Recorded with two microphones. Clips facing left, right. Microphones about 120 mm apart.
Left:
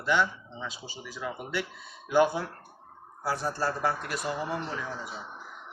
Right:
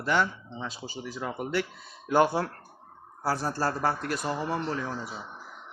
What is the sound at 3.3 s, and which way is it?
Speech, 40° right (ahead or behind).